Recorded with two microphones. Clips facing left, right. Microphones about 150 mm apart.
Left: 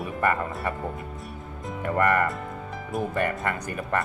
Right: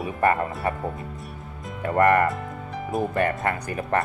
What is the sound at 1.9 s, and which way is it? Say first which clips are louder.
Speech: right 4 dB; 40° right (ahead or behind).